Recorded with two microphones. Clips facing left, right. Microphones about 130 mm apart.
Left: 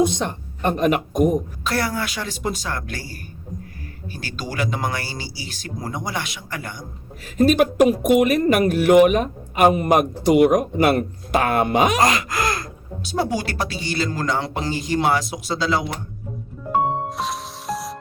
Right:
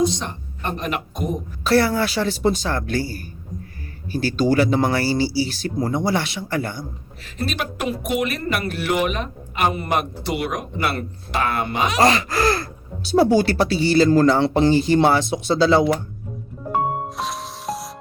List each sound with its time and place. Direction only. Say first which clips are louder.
0.0 s speech: left 1 dB; 55° left (ahead or behind)
1.6 s speech: right 6 dB; 30° right (ahead or behind)
7.3 s speech: left 11 dB; 45° left (ahead or behind)
12.0 s speech: right 3 dB; 30° right (ahead or behind)
17.1 s music: left 1 dB; centre (ahead or behind)